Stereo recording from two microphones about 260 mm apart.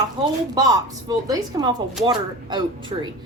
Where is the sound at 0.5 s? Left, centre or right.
Centre.